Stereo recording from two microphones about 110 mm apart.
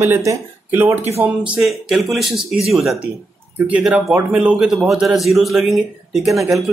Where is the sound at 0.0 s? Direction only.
25° right (ahead or behind).